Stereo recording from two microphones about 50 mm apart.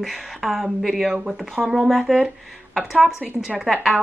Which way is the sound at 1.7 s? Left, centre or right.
Centre.